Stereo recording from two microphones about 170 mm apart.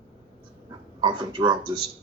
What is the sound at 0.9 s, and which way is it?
Speech, 25° right (ahead or behind).